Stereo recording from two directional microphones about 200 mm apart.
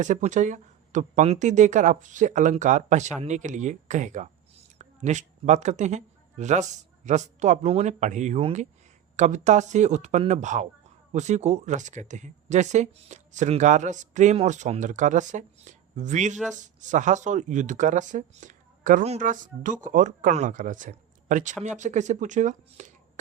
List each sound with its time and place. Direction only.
0.0 s speech: 40° right (ahead or behind)